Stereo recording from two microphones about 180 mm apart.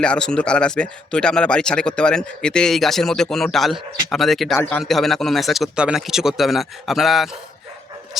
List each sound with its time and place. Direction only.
0.0 s speech: 5° left (ahead or behind)
8.1 s dog: centre (ahead or behind)